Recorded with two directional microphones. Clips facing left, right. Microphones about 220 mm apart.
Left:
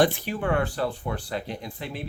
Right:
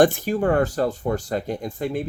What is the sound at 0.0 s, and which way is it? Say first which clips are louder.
Speech: right 5 dB; 45° right (ahead or behind).